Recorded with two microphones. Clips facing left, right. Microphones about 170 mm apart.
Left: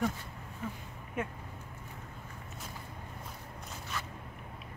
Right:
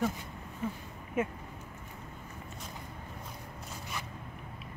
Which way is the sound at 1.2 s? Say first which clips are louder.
Right 5 dB; 5° right (ahead or behind).